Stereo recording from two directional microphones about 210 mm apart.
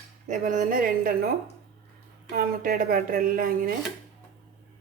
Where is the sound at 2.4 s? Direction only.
45° right (ahead or behind).